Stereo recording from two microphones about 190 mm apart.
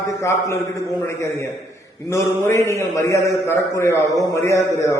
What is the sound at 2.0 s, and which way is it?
A man's voice, 15° left (ahead or behind).